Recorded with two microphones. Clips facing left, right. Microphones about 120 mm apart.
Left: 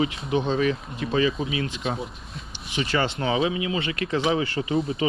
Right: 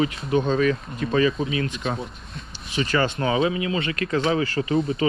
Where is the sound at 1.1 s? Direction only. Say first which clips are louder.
Right 2 dB; 45° right (ahead or behind).